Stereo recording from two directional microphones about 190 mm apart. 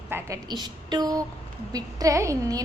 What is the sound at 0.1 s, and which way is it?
A woman's voice, 20° right (ahead or behind).